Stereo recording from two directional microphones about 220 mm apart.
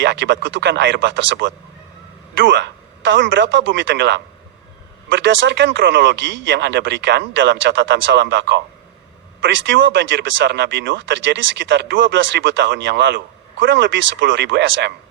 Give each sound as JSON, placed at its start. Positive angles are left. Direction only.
{"t": 0.0, "sound": "speech", "side_deg": -55}